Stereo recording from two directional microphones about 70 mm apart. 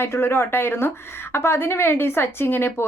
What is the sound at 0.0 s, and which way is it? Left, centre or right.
Speech, left.